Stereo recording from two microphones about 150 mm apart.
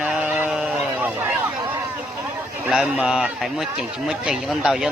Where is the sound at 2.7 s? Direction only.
5° right (ahead or behind).